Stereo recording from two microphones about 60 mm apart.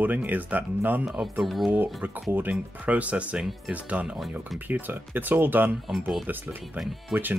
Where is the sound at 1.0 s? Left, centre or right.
Centre.